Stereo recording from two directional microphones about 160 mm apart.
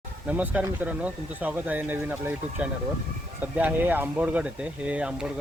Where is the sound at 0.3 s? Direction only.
10° right (ahead or behind).